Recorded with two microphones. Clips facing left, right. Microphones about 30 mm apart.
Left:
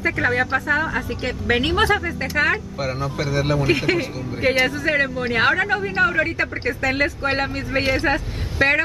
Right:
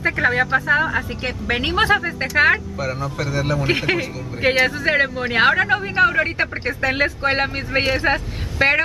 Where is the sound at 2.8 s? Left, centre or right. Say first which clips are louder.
Even; centre.